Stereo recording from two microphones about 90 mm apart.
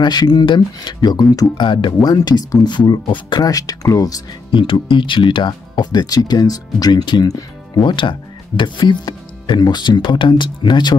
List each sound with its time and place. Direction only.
0.0 s speech: 50° left (ahead or behind)
1.3 s speech: 45° left (ahead or behind)
1.7 s speech: 60° left (ahead or behind)
2.0 s speech: 50° left (ahead or behind)
4.5 s speech: 65° left (ahead or behind); by 7.8 s 45° left (ahead or behind)
7.8 s speech: 60° left (ahead or behind)